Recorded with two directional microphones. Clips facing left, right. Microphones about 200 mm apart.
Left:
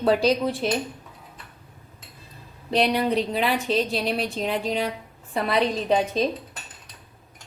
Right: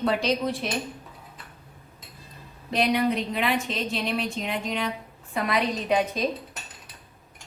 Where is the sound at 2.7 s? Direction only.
35° left (ahead or behind).